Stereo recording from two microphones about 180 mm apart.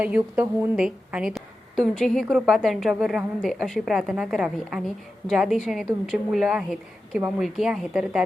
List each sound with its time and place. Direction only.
0.0 s a woman's voice: 10° right (ahead or behind)